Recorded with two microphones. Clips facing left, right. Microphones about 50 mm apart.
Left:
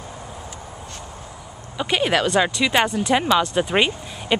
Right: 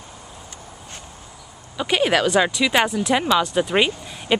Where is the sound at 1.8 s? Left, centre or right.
Centre.